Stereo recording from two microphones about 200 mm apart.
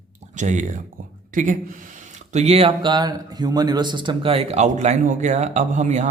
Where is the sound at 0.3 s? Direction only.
35° right (ahead or behind).